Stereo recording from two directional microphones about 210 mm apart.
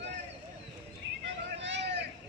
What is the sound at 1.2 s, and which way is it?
Vehicle, 60° right (ahead or behind).